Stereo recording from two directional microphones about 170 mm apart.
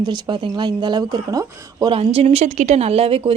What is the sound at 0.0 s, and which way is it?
Speech, 25° right (ahead or behind).